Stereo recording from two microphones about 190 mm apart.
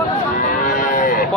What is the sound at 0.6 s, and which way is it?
Cattle, 50° left (ahead or behind).